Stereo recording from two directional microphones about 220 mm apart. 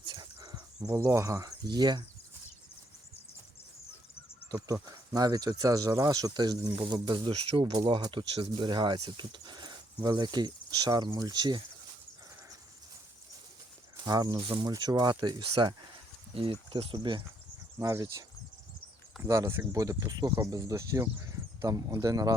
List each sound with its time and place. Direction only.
0.0 s cricket: 20° right (ahead or behind)
4.5 s speech: 15° right (ahead or behind)
14.0 s speech: 20° right (ahead or behind)